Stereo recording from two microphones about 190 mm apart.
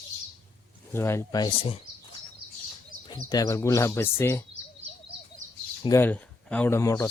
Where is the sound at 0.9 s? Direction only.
15° left (ahead or behind).